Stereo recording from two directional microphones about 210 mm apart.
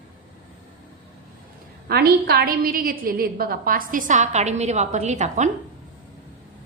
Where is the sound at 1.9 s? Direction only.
50° right (ahead or behind).